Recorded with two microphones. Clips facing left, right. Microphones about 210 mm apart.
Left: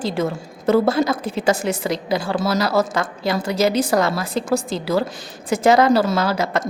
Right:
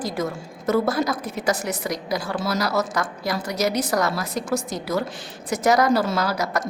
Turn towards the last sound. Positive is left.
turn(degrees=25)  # may be behind; listen again after turning